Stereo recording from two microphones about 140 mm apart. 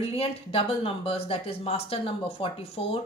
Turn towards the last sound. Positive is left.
turn(degrees=40)  # may be behind; listen again after turning